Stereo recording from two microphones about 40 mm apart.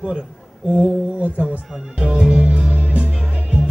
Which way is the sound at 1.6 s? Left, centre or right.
Centre.